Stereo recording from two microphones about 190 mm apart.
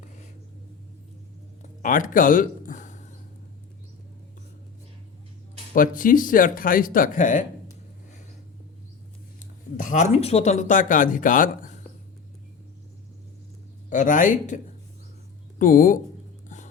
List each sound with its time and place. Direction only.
1.8 s a sound: 45° left (ahead or behind)
5.7 s speech: 45° left (ahead or behind)
9.4 s speech: 40° left (ahead or behind)
13.9 s speech: 40° left (ahead or behind)